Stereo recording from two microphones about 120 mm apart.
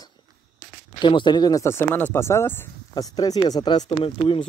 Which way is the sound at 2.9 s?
30° left (ahead or behind).